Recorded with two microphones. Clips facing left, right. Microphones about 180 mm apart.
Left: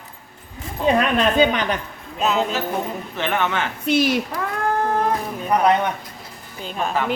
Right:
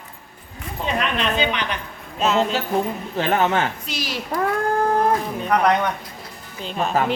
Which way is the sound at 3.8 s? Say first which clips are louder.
Left 11 dB; 55° left (ahead or behind).